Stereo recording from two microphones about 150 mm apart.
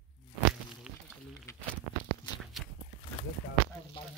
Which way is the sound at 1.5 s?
20° left (ahead or behind).